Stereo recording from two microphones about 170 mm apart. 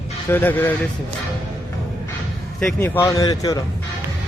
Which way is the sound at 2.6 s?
10° left (ahead or behind).